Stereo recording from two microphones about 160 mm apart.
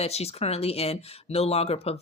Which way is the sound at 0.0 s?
40° left (ahead or behind).